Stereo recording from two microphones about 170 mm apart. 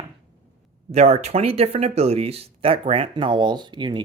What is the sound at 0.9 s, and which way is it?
Speech, 35° right (ahead or behind).